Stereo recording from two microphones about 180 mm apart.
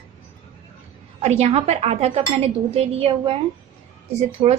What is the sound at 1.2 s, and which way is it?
Speech, 35° right (ahead or behind).